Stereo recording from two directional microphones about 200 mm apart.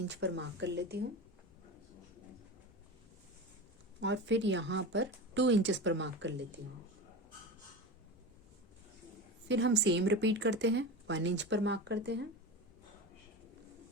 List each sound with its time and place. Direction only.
0.1 s speech: 60° right (ahead or behind)
4.0 s speech: 65° right (ahead or behind)
9.5 s speech: 60° right (ahead or behind)